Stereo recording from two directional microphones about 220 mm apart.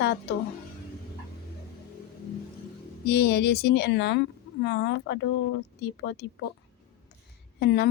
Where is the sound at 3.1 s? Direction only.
50° left (ahead or behind).